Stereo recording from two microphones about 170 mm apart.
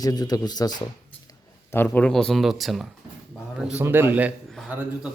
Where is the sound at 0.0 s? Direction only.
20° left (ahead or behind).